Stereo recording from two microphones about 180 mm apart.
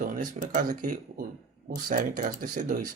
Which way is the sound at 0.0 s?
50° right (ahead or behind).